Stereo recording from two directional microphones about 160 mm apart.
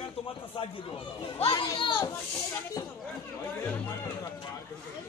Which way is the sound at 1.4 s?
30° left (ahead or behind).